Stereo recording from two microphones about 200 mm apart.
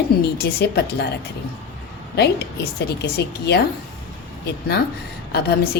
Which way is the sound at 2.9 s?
55° left (ahead or behind).